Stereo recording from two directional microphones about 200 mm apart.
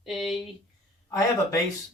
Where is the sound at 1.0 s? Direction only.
15° left (ahead or behind).